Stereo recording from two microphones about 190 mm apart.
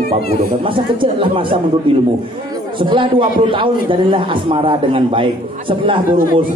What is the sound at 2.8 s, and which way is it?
A man's voice, 25° right (ahead or behind).